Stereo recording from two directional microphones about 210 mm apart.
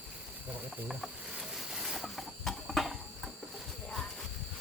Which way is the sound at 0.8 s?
Centre (ahead or behind).